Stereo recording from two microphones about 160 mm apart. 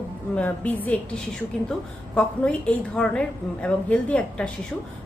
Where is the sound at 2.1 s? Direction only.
5° left (ahead or behind).